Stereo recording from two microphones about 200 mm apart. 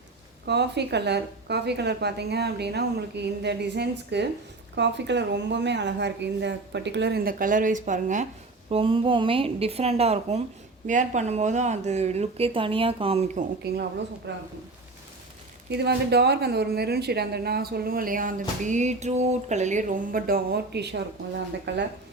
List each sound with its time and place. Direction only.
0.4 s a woman's voice: 60° right (ahead or behind); by 8.3 s 40° right (ahead or behind)
8.7 s a woman's voice: 25° right (ahead or behind)
14.3 s a woman's voice: 60° right (ahead or behind)
15.7 s a woman's voice: 55° right (ahead or behind)